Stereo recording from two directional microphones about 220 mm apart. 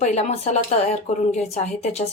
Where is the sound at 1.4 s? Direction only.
30° left (ahead or behind).